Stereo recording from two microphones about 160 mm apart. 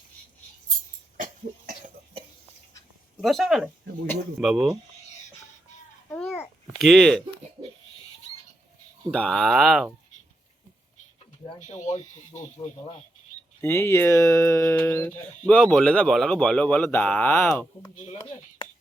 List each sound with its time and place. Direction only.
3.2 s speech: centre (ahead or behind)
6.1 s babbling: 10° left (ahead or behind)
6.7 s speech: centre (ahead or behind)
7.6 s pig: 45° right (ahead or behind)
9.1 s speech: 5° left (ahead or behind)
11.6 s speech: 50° left (ahead or behind)
13.6 s speech: 15° left (ahead or behind)
17.9 s speech: 45° left (ahead or behind)